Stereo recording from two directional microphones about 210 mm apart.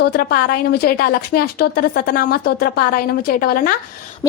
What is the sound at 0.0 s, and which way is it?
A woman's voice, 45° left (ahead or behind).